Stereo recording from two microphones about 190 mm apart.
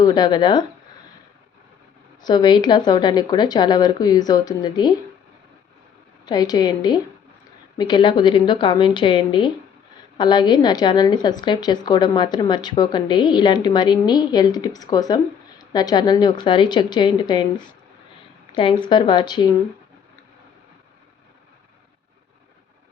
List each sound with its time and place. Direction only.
0.0 s speech: 20° left (ahead or behind)
2.2 s speech: 25° left (ahead or behind)
6.2 s speech: 20° left (ahead or behind)
18.9 s speech: 25° left (ahead or behind)